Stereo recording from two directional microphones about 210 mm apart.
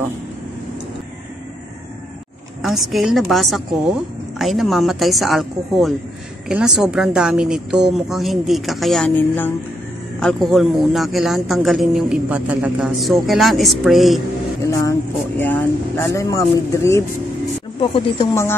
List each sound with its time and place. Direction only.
2.6 s speech: centre (ahead or behind)
14.7 s speech: 10° left (ahead or behind)
17.9 s speech: 25° left (ahead or behind)